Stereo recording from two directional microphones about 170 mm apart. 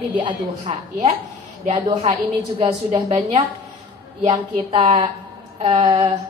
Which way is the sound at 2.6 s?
40° right (ahead or behind).